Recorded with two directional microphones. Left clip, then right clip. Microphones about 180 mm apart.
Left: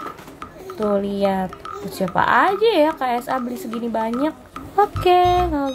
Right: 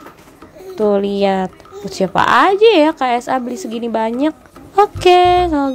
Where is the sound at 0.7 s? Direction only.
30° right (ahead or behind).